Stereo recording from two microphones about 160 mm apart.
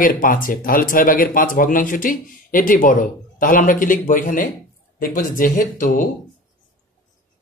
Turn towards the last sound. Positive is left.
turn(degrees=55)  # may be behind; listen again after turning